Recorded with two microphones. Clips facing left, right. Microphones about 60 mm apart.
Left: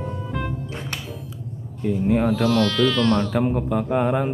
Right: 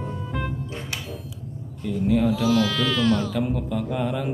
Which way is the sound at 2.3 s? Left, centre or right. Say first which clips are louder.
Left 2 dB; centre.